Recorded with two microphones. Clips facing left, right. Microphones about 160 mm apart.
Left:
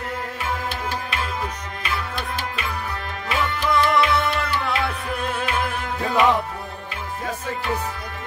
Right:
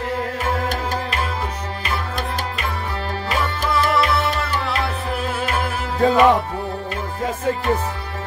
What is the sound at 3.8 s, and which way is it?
Music, 30° right (ahead or behind).